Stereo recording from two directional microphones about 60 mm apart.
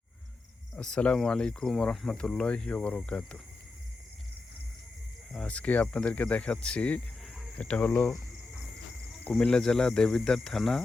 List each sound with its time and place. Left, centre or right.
0.8 s speech: centre
5.4 s speech: left
9.4 s speech: centre